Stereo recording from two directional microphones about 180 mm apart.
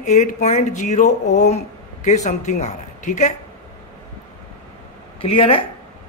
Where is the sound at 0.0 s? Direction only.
40° left (ahead or behind).